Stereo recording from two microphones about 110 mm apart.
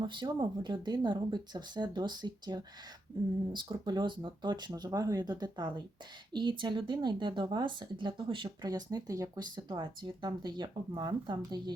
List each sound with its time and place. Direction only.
0.0 s speech: 45° right (ahead or behind)
9.6 s speech: 45° right (ahead or behind)